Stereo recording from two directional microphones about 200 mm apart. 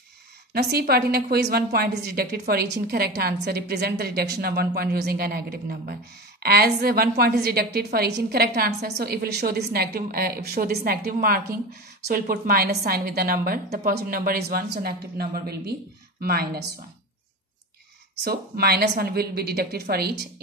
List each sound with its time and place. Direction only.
0.5 s a woman's voice: 50° right (ahead or behind)
18.1 s a woman's voice: 50° right (ahead or behind)